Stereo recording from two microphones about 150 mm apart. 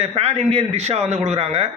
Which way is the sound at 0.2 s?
40° right (ahead or behind).